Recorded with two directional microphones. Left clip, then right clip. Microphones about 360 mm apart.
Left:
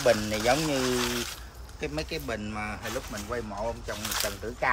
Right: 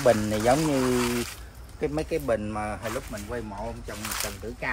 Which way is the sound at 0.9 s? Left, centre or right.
Centre.